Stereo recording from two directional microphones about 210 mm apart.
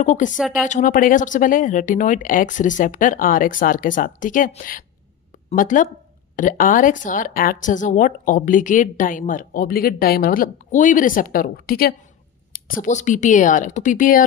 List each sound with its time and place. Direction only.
0.0 s speech: 35° left (ahead or behind)